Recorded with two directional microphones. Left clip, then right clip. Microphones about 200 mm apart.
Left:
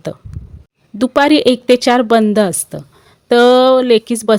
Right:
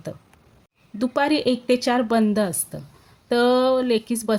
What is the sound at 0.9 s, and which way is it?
Speech, 40° left (ahead or behind).